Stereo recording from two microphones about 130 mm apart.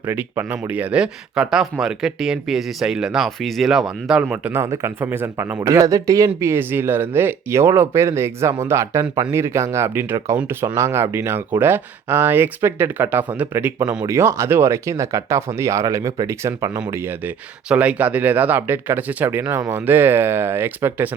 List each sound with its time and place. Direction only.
0.0 s speech: 15° right (ahead or behind)
4.6 s speech: 25° right (ahead or behind)